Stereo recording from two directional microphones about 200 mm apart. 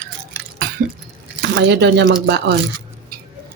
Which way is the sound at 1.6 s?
55° right (ahead or behind).